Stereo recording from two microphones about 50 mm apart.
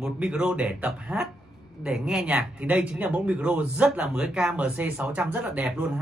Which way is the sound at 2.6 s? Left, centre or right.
Right.